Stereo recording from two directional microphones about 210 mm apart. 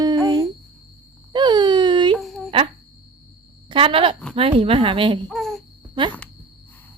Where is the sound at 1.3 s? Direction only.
20° right (ahead or behind).